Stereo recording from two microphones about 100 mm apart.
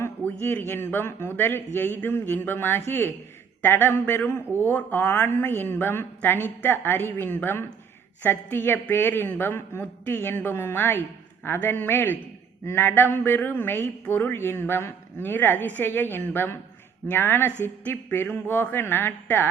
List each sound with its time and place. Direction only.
0.3 s speech: 20° left (ahead or behind)